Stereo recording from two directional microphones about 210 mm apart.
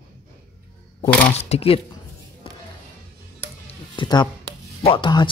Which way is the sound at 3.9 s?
20° left (ahead or behind).